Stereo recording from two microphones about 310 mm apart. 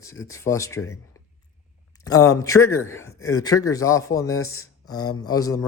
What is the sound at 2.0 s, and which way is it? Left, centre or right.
Speech, centre.